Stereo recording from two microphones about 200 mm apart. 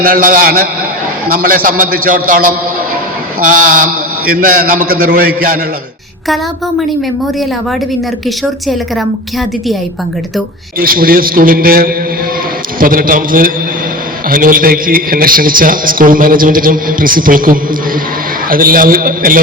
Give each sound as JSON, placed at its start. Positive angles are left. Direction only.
{"t": 0.0, "sound": "a man's voice", "side_deg": -45}
{"t": 6.2, "sound": "a sound", "side_deg": 0}
{"t": 10.8, "sound": "a man's voice", "side_deg": -45}